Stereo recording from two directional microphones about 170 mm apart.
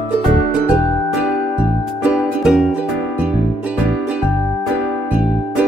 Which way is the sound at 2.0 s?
5° right (ahead or behind).